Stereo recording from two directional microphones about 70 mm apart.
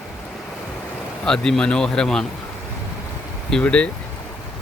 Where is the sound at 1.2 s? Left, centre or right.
Centre.